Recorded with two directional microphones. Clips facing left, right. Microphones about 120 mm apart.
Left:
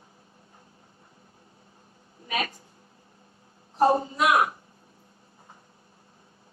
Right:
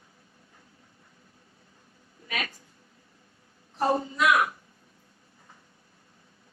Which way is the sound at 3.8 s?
30° left (ahead or behind).